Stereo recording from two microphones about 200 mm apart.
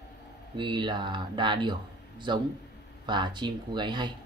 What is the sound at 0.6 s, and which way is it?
Speech, 25° right (ahead or behind).